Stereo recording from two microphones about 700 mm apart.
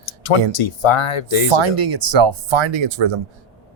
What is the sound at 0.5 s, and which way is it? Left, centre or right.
Speech, left.